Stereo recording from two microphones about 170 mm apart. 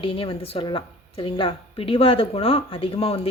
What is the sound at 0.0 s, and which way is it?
Speech, 30° left (ahead or behind).